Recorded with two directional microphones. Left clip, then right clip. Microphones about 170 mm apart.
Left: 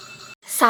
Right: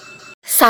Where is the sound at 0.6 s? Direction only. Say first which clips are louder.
Right 5 dB; 40° right (ahead or behind).